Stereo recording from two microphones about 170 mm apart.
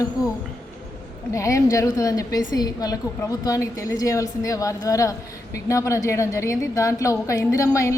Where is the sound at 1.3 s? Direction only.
20° left (ahead or behind).